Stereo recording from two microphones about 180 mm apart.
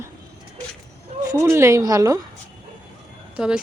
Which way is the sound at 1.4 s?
15° right (ahead or behind).